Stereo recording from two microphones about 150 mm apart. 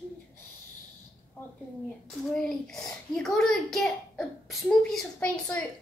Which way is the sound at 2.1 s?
5° left (ahead or behind).